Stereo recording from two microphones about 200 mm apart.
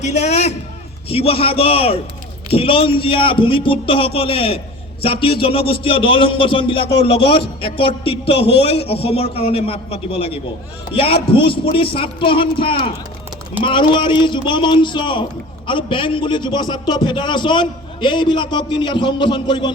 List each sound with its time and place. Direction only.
0.0 s a man's voice: 35° left (ahead or behind)